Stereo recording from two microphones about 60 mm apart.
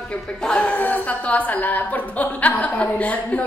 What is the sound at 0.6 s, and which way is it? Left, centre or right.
A woman's voice, left.